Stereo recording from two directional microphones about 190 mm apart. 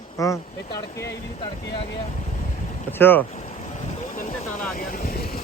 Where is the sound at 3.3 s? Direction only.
35° left (ahead or behind).